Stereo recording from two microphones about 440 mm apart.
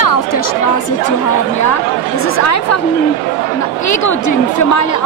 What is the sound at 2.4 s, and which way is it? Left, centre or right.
Speech, left.